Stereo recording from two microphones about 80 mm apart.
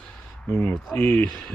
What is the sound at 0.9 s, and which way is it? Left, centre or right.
Speech, centre.